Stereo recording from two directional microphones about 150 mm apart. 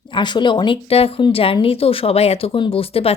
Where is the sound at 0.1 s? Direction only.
30° left (ahead or behind).